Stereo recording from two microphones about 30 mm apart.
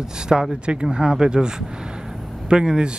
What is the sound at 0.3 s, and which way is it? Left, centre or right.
Speech, right.